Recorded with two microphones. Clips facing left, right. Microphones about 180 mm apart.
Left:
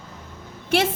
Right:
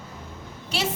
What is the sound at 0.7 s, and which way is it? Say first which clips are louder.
Speech: left 8 dB; 55° left (ahead or behind).